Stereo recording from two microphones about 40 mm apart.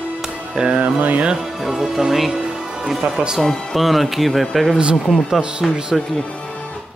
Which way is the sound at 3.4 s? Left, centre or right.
Centre.